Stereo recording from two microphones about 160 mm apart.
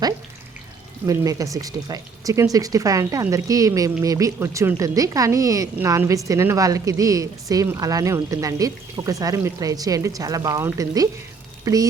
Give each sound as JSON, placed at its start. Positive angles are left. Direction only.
{"t": 1.0, "sound": "speech", "side_deg": -20}